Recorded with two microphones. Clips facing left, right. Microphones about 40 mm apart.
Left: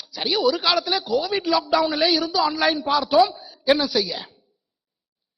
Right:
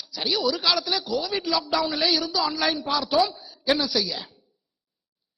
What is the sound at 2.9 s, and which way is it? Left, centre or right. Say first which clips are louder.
A man's voice: left 6 dB; centre.